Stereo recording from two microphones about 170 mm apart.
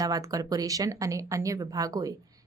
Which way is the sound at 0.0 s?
20° right (ahead or behind).